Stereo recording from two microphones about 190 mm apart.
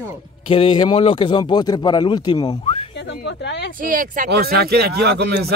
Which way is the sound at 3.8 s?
45° right (ahead or behind).